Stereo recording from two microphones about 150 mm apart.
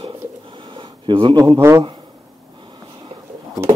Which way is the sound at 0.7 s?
35° right (ahead or behind).